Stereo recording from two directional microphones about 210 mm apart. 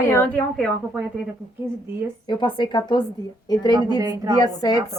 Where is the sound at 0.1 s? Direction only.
10° left (ahead or behind).